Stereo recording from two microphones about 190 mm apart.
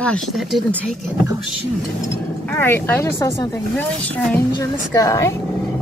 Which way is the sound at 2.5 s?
10° left (ahead or behind).